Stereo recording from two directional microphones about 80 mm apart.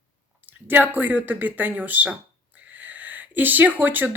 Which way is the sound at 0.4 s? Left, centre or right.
Right.